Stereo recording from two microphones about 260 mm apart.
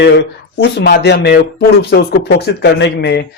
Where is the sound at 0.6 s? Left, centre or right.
Left.